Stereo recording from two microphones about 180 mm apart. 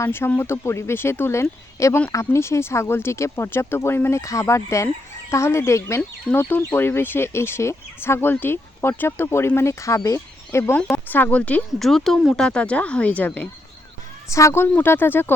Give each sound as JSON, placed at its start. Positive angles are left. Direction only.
{"t": 0.0, "sound": "speech", "side_deg": 10}